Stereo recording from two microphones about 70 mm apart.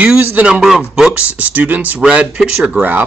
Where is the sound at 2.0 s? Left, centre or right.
Centre.